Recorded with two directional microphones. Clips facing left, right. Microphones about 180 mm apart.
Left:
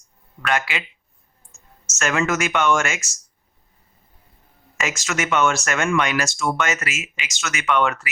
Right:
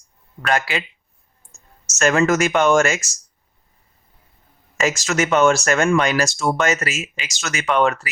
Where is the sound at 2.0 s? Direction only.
40° right (ahead or behind).